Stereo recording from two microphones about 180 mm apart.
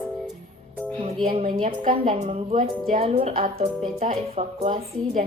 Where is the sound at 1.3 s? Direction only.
40° right (ahead or behind).